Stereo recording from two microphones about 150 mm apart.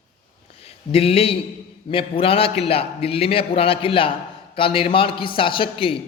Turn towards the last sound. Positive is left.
turn(degrees=35)  # may be behind; listen again after turning